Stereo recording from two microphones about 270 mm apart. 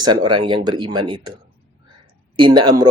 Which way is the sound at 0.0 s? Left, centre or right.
Centre.